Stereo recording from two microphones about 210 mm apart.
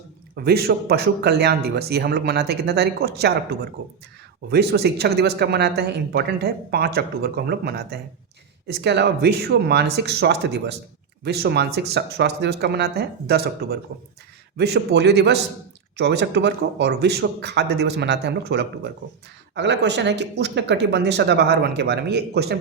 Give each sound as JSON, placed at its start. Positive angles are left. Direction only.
{"t": 0.4, "sound": "speech", "side_deg": -50}